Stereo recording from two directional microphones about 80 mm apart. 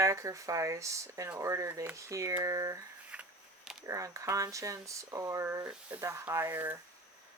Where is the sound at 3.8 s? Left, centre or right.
Right.